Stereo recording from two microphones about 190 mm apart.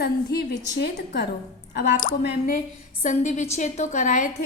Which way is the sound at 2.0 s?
45° left (ahead or behind).